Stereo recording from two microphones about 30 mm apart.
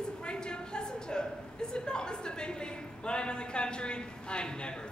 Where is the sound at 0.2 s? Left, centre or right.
Left.